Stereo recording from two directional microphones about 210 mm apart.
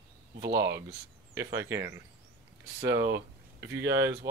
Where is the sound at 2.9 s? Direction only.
55° right (ahead or behind).